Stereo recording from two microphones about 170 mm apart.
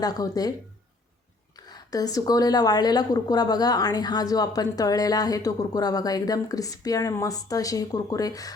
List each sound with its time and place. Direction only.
0.0 s a woman's voice: 20° left (ahead or behind)
1.6 s a woman's voice: 20° left (ahead or behind)